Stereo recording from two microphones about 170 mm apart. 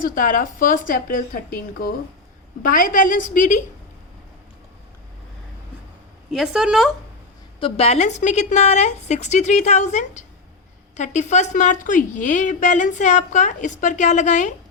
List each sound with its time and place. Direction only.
0.0 s a woman's voice: 55° left (ahead or behind)
6.3 s a woman's voice: 5° right (ahead or behind)
7.6 s a woman's voice: 35° left (ahead or behind)